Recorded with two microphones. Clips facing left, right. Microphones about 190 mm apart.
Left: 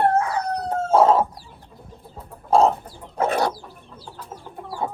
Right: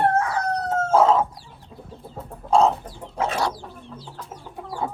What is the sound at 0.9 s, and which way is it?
Chicken, 30° left (ahead or behind).